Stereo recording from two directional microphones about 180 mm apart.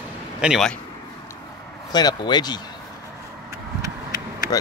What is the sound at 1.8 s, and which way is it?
Speech, 20° left (ahead or behind).